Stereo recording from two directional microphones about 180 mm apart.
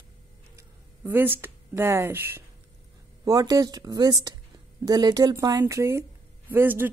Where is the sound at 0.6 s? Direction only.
10° right (ahead or behind).